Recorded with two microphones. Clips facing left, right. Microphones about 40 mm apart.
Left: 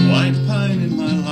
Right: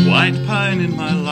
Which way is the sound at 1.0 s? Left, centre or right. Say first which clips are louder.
Even; right.